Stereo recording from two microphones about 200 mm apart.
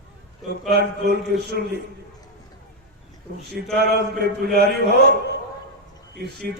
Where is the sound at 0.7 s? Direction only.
55° right (ahead or behind).